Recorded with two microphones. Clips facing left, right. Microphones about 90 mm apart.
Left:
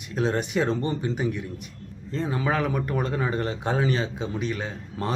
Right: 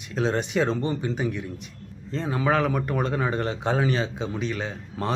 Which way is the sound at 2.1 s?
20° right (ahead or behind).